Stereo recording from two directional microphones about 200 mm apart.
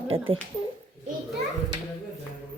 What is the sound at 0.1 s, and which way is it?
Speech, 30° right (ahead or behind).